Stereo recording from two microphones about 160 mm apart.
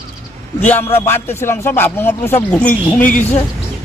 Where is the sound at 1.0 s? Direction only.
15° left (ahead or behind).